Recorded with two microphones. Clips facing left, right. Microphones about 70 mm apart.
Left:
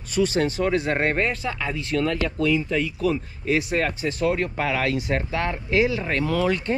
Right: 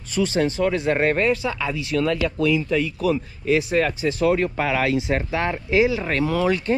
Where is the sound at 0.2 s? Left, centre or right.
Right.